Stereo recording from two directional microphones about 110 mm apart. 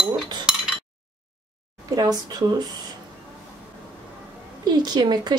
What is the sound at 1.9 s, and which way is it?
Speech, 35° right (ahead or behind).